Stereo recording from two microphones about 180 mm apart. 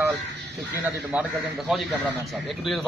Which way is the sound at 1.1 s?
5° right (ahead or behind).